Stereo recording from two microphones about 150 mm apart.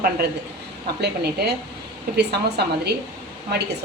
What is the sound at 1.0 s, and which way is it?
Speech, 90° right.